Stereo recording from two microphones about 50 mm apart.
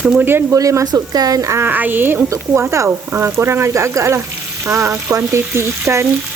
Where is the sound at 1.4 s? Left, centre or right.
Right.